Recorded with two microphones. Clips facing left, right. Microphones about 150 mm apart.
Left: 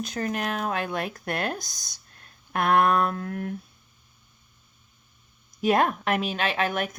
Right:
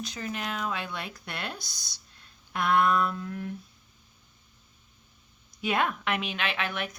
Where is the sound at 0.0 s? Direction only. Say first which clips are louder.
Left 6 dB; 50° left (ahead or behind).